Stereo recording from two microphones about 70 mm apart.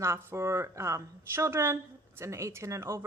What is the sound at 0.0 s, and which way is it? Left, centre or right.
A woman's voice, right.